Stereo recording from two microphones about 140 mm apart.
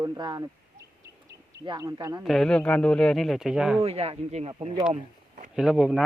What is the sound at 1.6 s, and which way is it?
Speech, 25° right (ahead or behind).